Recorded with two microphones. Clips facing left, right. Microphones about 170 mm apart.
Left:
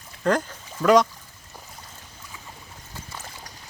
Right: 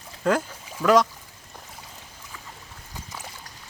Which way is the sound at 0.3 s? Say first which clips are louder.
Even; 5° right (ahead or behind).